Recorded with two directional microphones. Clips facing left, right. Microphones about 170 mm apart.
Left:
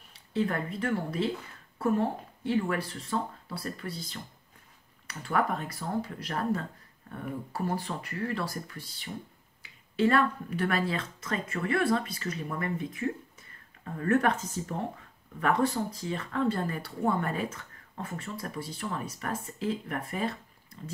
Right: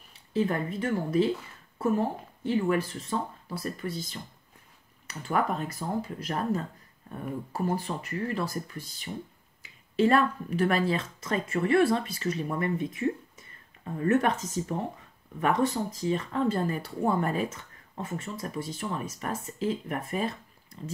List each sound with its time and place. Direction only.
0.3 s speech: 20° right (ahead or behind)
2.4 s speech: 20° right (ahead or behind)
5.3 s speech: 20° right (ahead or behind)
10.0 s speech: 25° right (ahead or behind)